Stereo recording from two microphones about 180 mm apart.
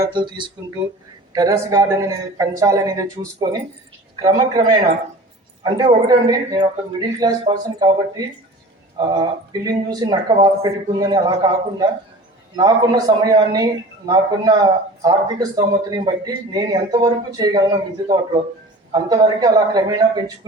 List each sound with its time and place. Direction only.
0.0 s a man's voice: 25° right (ahead or behind)